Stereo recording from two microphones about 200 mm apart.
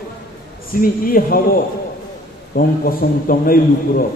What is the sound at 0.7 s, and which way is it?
Speech, 45° left (ahead or behind).